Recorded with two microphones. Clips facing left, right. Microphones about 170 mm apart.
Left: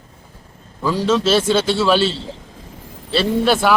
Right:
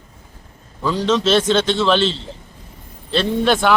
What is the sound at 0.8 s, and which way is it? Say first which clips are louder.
A man's voice: left 1 dB; 10° left (ahead or behind).